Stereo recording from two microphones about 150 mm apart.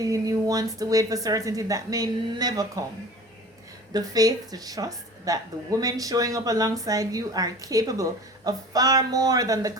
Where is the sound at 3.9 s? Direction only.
25° right (ahead or behind).